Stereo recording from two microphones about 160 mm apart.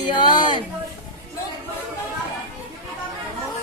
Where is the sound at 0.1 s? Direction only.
25° left (ahead or behind).